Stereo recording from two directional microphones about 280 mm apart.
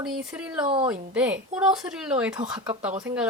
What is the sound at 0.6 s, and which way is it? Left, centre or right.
Speech, centre.